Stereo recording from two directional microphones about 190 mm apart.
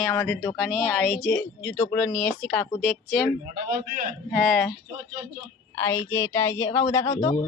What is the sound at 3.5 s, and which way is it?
Speech, 50° right (ahead or behind).